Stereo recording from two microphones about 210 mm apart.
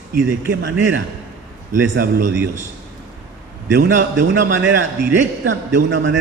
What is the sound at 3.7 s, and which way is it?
Speech, 55° right (ahead or behind).